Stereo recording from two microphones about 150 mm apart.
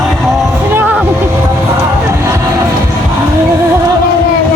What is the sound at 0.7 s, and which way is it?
Vehicle, 10° right (ahead or behind).